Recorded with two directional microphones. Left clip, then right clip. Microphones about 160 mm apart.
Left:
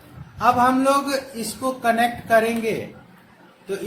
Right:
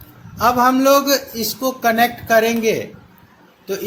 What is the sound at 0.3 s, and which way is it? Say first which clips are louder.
Speech: right 3 dB; 45° right (ahead or behind).